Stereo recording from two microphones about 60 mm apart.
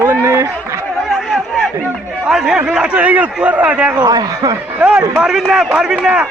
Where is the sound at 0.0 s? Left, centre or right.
Right.